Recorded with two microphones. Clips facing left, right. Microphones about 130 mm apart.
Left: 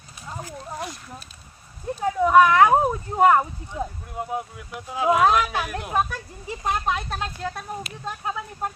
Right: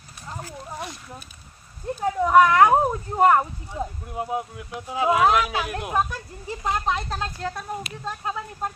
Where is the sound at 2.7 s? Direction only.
5° left (ahead or behind).